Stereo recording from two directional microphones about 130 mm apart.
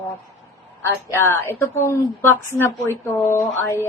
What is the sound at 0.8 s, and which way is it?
A woman's voice, 20° left (ahead or behind).